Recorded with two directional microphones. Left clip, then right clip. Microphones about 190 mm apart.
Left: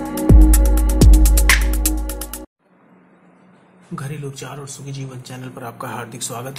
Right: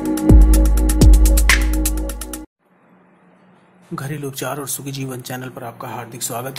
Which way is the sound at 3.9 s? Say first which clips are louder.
Right 3 dB; 20° right (ahead or behind).